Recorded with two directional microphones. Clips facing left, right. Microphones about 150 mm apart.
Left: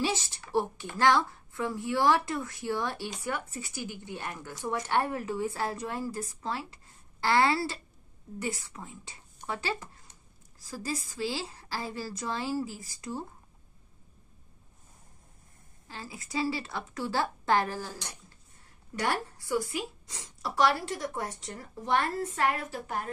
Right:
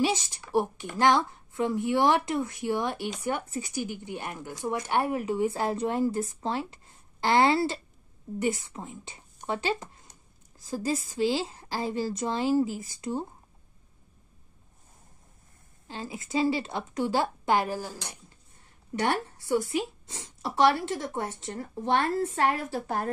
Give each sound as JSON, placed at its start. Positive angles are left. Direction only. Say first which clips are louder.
{"t": 0.0, "sound": "speech", "louder": "right 4 dB", "side_deg": -15}
{"t": 10.1, "sound": "a sound", "louder": "right 2 dB", "side_deg": -40}
{"t": 10.6, "sound": "speech", "louder": "right 6 dB", "side_deg": -20}
{"t": 15.9, "sound": "speech", "louder": "right 6 dB", "side_deg": -20}
{"t": 18.9, "sound": "speech", "louder": "right 3 dB", "side_deg": -25}